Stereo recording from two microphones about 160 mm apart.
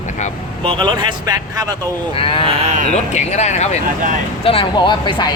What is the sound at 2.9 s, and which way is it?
Speech, 45° left (ahead or behind).